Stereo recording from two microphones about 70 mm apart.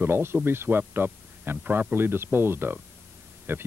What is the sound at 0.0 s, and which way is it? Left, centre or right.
Speech, right.